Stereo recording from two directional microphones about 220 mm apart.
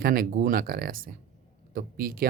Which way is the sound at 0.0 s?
40° right (ahead or behind).